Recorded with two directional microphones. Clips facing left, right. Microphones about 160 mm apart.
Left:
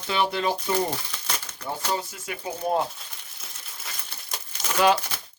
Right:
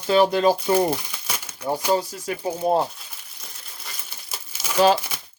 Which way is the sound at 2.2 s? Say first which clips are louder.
Right 6 dB; 35° right (ahead or behind).